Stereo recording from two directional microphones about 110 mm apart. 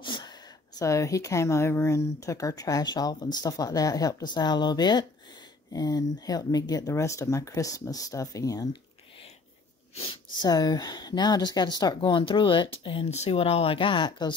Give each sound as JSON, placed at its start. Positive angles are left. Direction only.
{"t": 0.0, "sound": "speech", "side_deg": 45}
{"t": 10.4, "sound": "speech", "side_deg": 35}
{"t": 13.1, "sound": "speech", "side_deg": 75}